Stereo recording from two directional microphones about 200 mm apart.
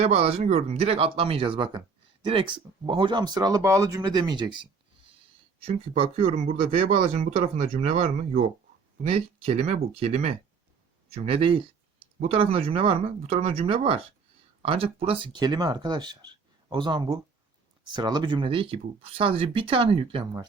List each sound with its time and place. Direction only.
0.0 s speech: 30° right (ahead or behind)
5.5 s speech: 30° right (ahead or behind)